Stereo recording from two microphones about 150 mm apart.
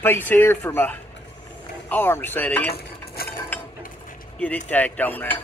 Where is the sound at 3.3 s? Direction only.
15° left (ahead or behind).